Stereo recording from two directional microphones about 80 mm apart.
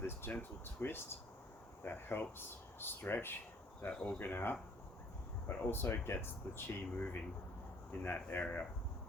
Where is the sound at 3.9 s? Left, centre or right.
Centre.